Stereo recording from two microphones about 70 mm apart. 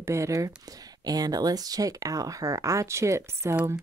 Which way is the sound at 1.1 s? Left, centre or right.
Right.